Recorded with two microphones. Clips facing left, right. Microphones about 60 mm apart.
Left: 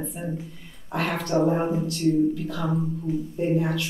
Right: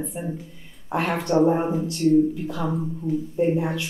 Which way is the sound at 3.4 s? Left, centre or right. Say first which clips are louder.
Right 2 dB; centre.